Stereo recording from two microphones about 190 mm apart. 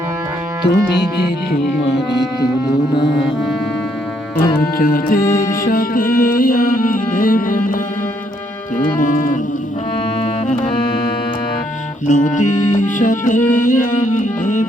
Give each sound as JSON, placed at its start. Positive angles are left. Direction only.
{"t": 0.6, "sound": "music", "side_deg": 65}
{"t": 4.8, "sound": "music", "side_deg": 50}
{"t": 9.0, "sound": "music", "side_deg": 45}
{"t": 12.0, "sound": "music", "side_deg": 40}